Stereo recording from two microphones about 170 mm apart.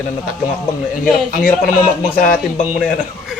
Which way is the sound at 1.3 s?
55° left (ahead or behind).